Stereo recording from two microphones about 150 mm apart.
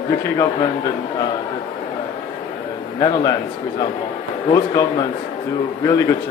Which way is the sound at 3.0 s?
25° left (ahead or behind).